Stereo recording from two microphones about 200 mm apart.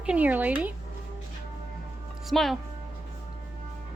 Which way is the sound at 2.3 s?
Centre (ahead or behind).